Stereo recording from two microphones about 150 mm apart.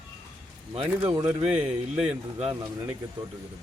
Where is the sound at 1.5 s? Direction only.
5° right (ahead or behind).